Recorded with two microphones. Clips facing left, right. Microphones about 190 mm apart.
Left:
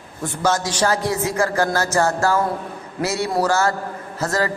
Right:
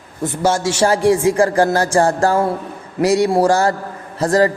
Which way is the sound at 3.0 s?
15° right (ahead or behind).